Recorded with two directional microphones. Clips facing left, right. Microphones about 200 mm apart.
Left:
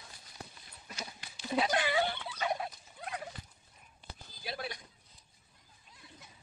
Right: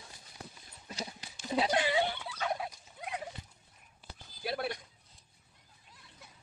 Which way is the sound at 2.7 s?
15° right (ahead or behind).